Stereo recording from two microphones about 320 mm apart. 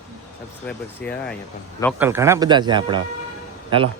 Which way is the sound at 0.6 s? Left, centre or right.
Centre.